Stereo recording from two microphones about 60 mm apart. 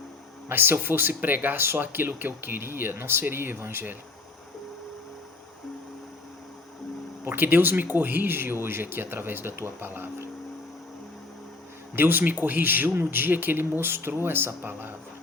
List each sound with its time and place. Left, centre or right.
0.4 s speech: right
7.3 s speech: right
11.9 s speech: right